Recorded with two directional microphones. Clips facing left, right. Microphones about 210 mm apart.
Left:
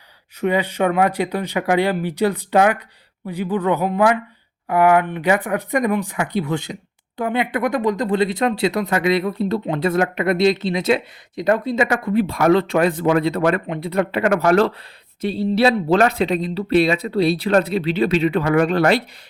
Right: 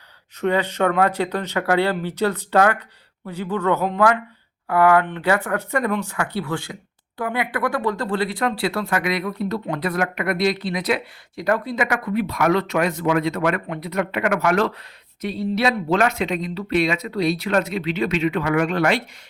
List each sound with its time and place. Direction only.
0.3 s speech: 10° left (ahead or behind); by 19.0 s 35° left (ahead or behind)